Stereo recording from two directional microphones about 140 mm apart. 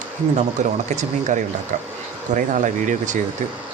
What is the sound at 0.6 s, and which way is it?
Speech, 60° right (ahead or behind).